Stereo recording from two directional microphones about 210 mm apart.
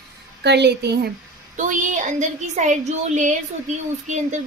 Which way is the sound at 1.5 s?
35° right (ahead or behind).